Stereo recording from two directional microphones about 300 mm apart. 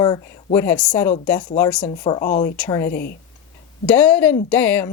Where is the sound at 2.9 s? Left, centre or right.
Left.